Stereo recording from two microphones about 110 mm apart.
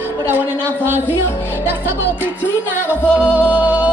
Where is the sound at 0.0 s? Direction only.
20° right (ahead or behind).